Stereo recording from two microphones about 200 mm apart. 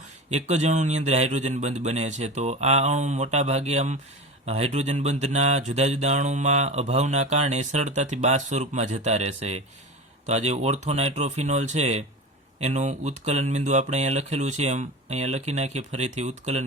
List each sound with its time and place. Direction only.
0.3 s speech: 35° right (ahead or behind)